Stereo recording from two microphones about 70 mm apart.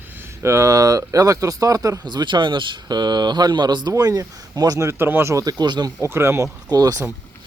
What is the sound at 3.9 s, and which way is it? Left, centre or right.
Speech, right.